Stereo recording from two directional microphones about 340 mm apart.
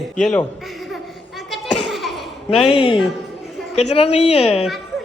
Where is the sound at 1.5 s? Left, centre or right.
Centre.